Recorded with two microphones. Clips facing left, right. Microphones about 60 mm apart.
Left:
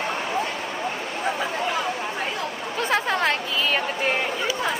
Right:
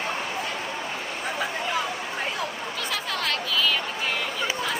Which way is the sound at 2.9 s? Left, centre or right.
Left.